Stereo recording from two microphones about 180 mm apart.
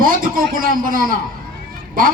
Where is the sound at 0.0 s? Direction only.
50° right (ahead or behind).